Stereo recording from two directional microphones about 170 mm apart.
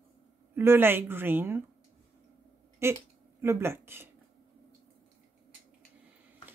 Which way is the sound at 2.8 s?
15° right (ahead or behind).